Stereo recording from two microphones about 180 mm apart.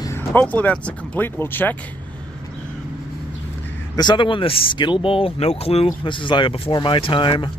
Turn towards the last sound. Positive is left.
turn(degrees=25)  # may be behind; listen again after turning